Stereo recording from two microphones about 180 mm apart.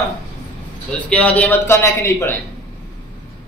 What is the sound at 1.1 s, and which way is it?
Speech, 10° left (ahead or behind).